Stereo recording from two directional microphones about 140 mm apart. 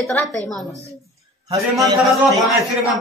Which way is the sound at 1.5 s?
25° right (ahead or behind).